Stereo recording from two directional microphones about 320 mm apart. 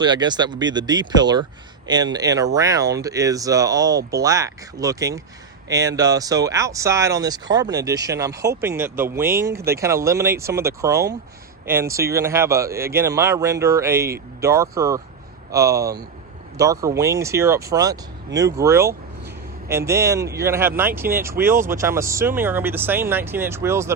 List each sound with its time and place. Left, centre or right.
0.0 s speech: centre